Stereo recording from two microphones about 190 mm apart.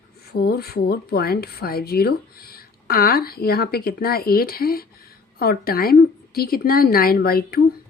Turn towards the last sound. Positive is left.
turn(degrees=50)  # may be behind; listen again after turning